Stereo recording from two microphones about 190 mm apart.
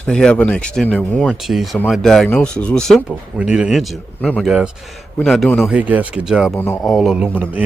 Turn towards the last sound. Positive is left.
turn(degrees=-10)  # may be behind; listen again after turning